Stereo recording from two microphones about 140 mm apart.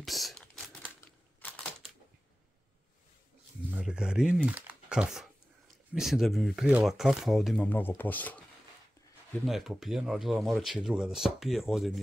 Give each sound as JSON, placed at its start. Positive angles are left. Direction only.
{"t": 0.0, "sound": "typing", "side_deg": 0}
{"t": 3.7, "sound": "speech", "side_deg": -5}
{"t": 7.6, "sound": "speech", "side_deg": 15}
{"t": 9.5, "sound": "speech", "side_deg": 0}